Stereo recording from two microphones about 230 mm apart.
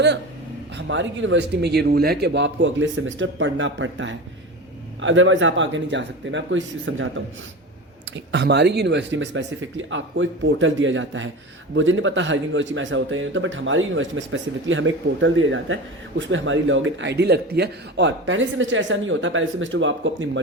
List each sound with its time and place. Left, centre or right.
0.8 s a man's voice: right
8.1 s a man's voice: right